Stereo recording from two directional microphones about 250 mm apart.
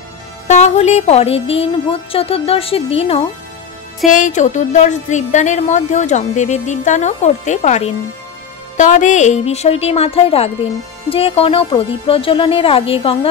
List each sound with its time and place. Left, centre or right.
0.5 s a woman's voice: left